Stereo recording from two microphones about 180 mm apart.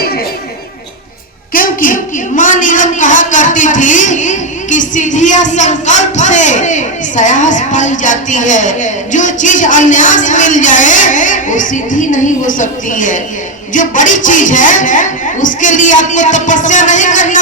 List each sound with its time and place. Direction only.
1.5 s a woman's voice: 50° left (ahead or behind)